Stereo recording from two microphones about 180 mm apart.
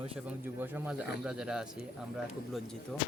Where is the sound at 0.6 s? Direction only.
10° right (ahead or behind).